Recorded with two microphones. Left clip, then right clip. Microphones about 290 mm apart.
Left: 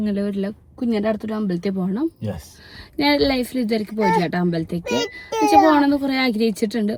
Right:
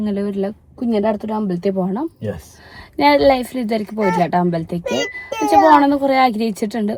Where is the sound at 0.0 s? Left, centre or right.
Right.